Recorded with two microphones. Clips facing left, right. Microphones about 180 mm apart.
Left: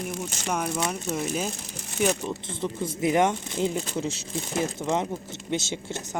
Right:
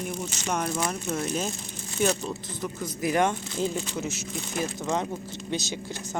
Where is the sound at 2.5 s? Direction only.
25° left (ahead or behind).